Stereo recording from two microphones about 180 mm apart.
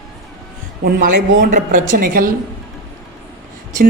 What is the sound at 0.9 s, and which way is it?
A man's voice, 55° right (ahead or behind).